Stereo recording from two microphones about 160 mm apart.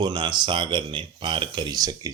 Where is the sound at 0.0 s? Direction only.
30° right (ahead or behind).